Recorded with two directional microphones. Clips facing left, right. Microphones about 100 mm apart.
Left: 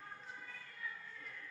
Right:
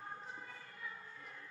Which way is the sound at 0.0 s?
30° right (ahead or behind).